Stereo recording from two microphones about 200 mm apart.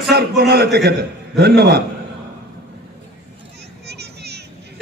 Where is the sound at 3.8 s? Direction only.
55° right (ahead or behind).